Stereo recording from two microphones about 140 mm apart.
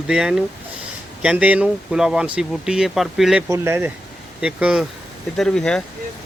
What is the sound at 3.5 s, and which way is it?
Speech, 20° right (ahead or behind).